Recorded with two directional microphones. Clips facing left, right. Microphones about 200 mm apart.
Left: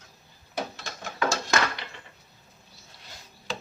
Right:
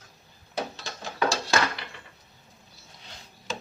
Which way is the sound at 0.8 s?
30° right (ahead or behind).